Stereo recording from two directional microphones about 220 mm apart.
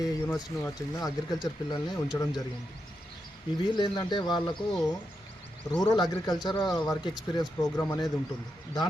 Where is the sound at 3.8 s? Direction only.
20° left (ahead or behind).